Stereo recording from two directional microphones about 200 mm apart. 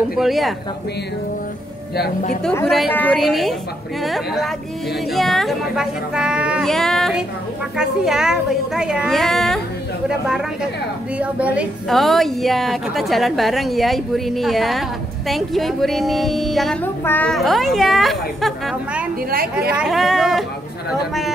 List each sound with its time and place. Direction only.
0.1 s a woman's voice: centre (ahead or behind)
2.4 s a woman's voice: 10° left (ahead or behind)